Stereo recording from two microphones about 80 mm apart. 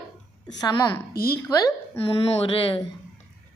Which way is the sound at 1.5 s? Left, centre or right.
Left.